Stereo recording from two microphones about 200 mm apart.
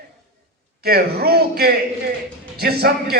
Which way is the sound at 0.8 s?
50° right (ahead or behind).